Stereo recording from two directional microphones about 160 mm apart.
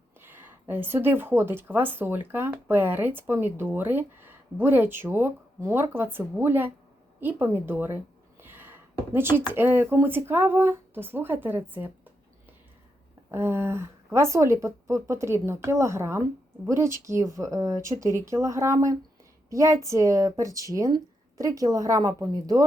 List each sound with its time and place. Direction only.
0.2 s speech: 15° right (ahead or behind)
13.3 s speech: 15° right (ahead or behind)